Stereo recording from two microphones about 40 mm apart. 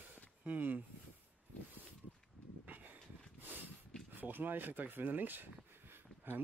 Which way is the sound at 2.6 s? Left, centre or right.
Right.